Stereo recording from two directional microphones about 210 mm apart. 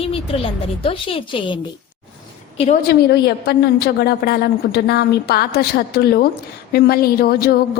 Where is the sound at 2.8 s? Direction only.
50° left (ahead or behind).